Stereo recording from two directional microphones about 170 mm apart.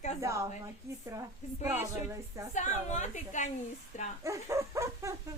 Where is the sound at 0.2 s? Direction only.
20° right (ahead or behind).